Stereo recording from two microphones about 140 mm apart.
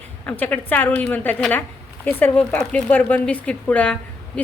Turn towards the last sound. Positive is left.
turn(degrees=10)  # may be behind; listen again after turning